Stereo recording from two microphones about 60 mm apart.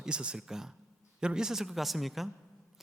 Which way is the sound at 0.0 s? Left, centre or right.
Centre.